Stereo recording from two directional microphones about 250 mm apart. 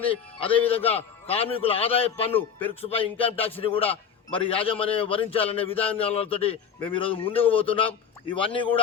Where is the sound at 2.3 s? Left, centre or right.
Centre.